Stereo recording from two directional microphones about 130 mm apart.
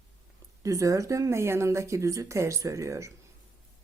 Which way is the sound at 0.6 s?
25° right (ahead or behind).